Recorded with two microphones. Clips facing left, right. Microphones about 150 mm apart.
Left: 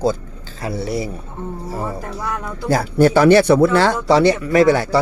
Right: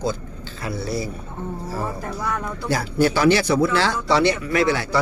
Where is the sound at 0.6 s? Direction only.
35° left (ahead or behind).